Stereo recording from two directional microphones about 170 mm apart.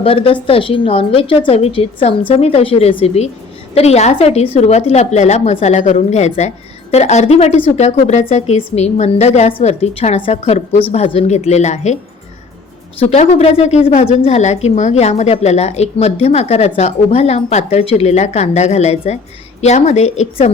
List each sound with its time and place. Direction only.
0.0 s a woman's voice: 35° left (ahead or behind)
13.0 s a woman's voice: 40° left (ahead or behind)